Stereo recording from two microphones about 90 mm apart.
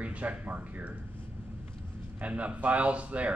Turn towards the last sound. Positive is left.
turn(degrees=-15)  # may be behind; listen again after turning